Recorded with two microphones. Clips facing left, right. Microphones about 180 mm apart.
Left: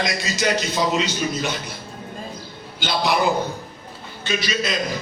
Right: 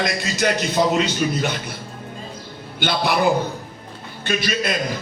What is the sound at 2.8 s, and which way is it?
Speech, 60° right (ahead or behind).